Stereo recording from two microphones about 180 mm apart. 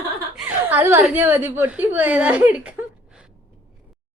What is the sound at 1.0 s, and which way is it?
Speech, 10° right (ahead or behind).